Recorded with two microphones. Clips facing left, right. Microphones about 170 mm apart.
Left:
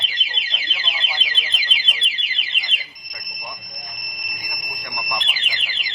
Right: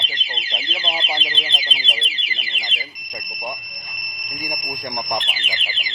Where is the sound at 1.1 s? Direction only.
30° right (ahead or behind).